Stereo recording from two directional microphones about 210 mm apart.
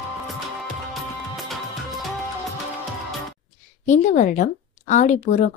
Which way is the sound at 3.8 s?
35° left (ahead or behind).